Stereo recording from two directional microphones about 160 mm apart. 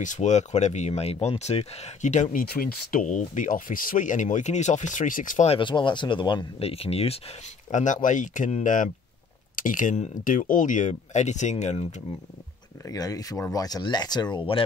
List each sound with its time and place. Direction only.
0.0 s speech: 50° left (ahead or behind)
2.4 s speech: 65° left (ahead or behind)
5.5 s speech: 30° left (ahead or behind)
12.8 s speech: 20° left (ahead or behind)